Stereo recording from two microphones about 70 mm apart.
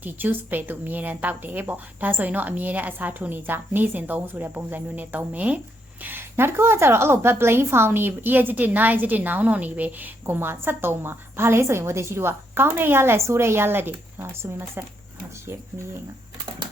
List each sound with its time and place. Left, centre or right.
0.0 s a woman's voice: right